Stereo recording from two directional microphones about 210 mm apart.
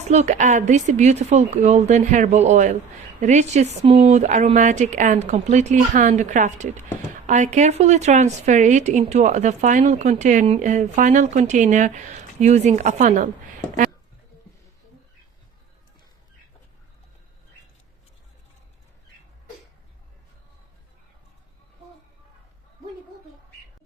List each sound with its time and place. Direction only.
0.1 s a woman's voice: 35° right (ahead or behind)